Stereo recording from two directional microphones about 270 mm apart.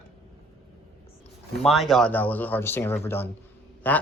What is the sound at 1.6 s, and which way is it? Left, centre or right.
Speech, centre.